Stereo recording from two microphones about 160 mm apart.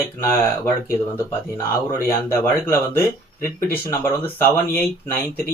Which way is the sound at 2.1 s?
15° left (ahead or behind).